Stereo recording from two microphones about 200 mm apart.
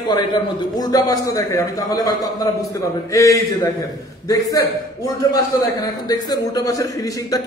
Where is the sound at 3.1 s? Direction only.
15° left (ahead or behind).